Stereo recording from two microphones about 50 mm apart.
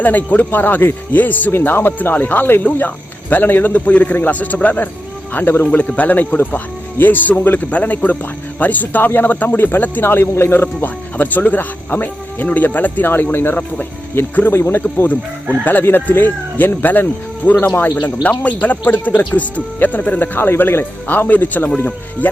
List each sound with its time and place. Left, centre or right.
0.0 s speech: left
1.5 s speech: left
3.7 s a man's voice: left
5.7 s a man's voice: left
10.8 s speech: left
14.5 s speech: left
15.0 s speech: left